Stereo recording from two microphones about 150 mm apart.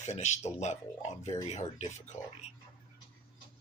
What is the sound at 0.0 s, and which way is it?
Speech, 50° left (ahead or behind).